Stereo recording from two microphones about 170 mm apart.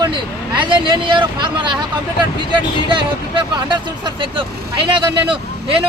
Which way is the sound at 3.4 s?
25° right (ahead or behind).